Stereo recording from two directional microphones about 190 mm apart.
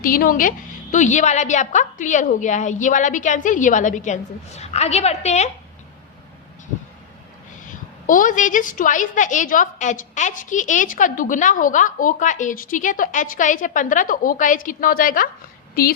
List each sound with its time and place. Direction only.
0.0 s a woman's voice: 50° left (ahead or behind)
7.6 s a woman's voice: 45° left (ahead or behind)